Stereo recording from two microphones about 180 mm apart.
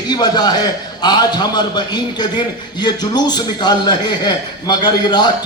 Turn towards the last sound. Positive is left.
turn(degrees=25)  # may be behind; listen again after turning